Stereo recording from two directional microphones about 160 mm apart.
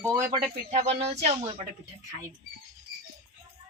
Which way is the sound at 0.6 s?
40° right (ahead or behind).